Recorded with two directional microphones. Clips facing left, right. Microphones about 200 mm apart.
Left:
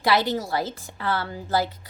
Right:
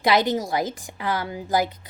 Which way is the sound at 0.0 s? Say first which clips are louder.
Right 2 dB; 20° right (ahead or behind).